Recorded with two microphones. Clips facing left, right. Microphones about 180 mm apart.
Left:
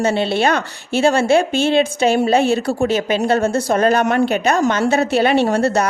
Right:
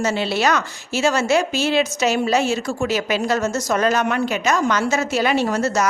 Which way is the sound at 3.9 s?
45° left (ahead or behind).